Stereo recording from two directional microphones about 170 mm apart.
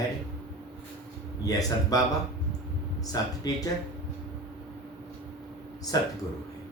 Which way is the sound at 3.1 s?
20° left (ahead or behind).